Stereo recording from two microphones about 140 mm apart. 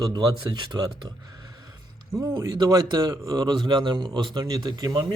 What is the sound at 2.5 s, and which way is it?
Speech, 30° right (ahead or behind).